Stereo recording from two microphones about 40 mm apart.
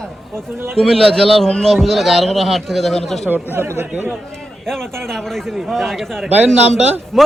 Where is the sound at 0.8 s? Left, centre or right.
Centre.